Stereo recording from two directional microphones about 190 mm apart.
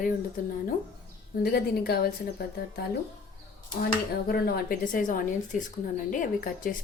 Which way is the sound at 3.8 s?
55° left (ahead or behind).